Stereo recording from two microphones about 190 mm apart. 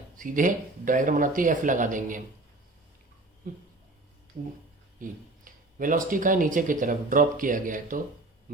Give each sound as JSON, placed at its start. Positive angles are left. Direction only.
{"t": 0.2, "sound": "speech", "side_deg": -45}
{"t": 3.4, "sound": "speech", "side_deg": -50}
{"t": 5.0, "sound": "speech", "side_deg": -45}